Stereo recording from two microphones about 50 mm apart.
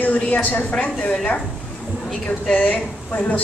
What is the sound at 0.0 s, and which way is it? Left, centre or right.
Speech, left.